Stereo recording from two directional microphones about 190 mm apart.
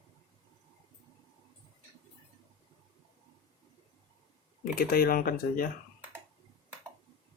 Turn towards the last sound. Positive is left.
turn(degrees=50)  # may be behind; listen again after turning